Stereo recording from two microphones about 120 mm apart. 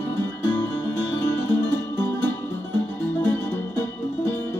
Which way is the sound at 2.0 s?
20° left (ahead or behind).